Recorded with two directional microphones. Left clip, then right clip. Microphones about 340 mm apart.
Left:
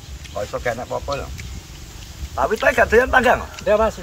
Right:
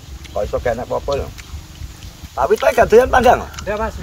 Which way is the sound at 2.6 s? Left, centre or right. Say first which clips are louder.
Right 3 dB; right.